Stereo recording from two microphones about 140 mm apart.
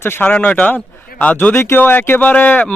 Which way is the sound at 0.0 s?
15° left (ahead or behind).